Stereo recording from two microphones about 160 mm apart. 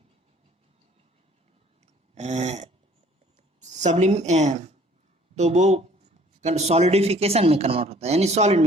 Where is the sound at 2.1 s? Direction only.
45° right (ahead or behind).